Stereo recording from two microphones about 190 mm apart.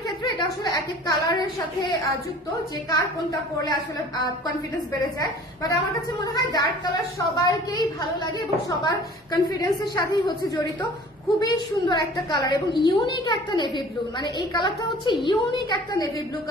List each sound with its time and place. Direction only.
0.2 s a woman's voice: 20° left (ahead or behind)
2.9 s a woman's voice: 20° left (ahead or behind)
5.2 s a woman's voice: 20° left (ahead or behind)